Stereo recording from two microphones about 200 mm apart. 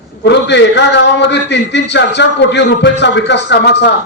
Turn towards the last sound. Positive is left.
turn(degrees=60)  # may be behind; listen again after turning